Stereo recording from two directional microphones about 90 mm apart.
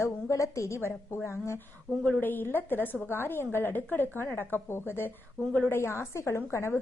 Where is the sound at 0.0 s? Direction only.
35° left (ahead or behind).